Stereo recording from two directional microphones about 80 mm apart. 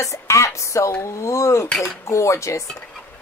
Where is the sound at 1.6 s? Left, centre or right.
Centre.